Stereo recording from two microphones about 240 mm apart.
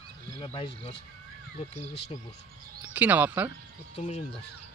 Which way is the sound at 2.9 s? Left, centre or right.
Centre.